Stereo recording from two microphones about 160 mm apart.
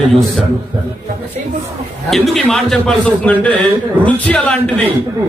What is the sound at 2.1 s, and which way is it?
A man's voice, centre (ahead or behind).